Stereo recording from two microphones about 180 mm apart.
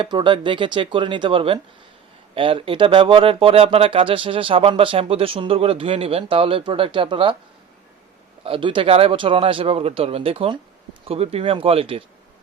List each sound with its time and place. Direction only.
0.0 s speech: 25° right (ahead or behind)
8.4 s speech: 30° right (ahead or behind)